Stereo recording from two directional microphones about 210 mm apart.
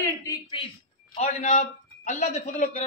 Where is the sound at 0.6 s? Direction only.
25° left (ahead or behind).